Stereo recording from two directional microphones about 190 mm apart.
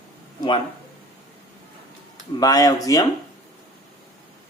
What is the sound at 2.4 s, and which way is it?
Speech, 20° left (ahead or behind).